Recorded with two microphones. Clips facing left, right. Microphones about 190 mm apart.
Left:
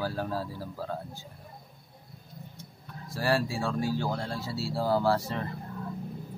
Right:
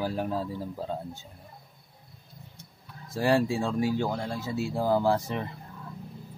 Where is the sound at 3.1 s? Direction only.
20° right (ahead or behind).